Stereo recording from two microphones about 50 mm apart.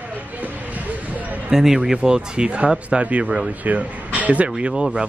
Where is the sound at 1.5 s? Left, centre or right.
Centre.